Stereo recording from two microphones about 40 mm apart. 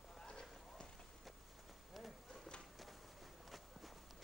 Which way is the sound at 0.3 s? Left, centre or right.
Left.